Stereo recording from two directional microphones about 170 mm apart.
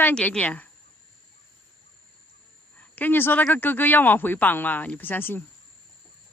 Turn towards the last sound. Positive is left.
turn(degrees=10)  # may be behind; listen again after turning